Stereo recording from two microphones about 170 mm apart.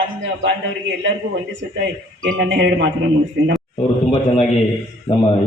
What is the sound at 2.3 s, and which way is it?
Speech, 90° right.